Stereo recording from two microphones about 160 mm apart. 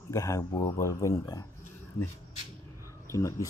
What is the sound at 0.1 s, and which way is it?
Speech, 20° left (ahead or behind).